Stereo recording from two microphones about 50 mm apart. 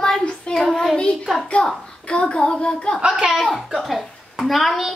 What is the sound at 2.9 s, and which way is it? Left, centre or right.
Speech, centre.